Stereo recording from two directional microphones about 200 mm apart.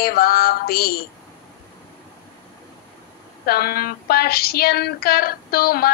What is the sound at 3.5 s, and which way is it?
A woman's voice, 50° left (ahead or behind).